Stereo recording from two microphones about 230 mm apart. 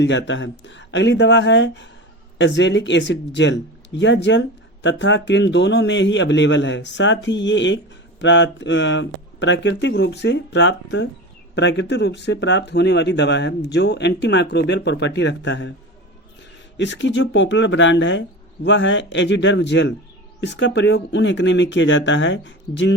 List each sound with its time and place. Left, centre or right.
0.0 s speech: left
16.7 s speech: left